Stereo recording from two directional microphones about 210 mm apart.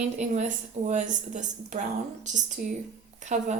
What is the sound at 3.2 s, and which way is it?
Speech, 35° right (ahead or behind).